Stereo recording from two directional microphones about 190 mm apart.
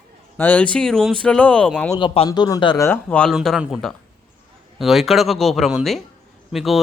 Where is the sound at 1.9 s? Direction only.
30° left (ahead or behind).